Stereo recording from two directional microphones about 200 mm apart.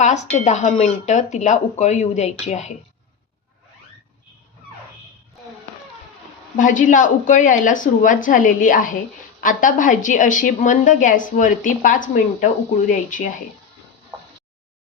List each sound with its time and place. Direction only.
0.0 s a woman's voice: 35° left (ahead or behind)
6.6 s a woman's voice: 40° left (ahead or behind)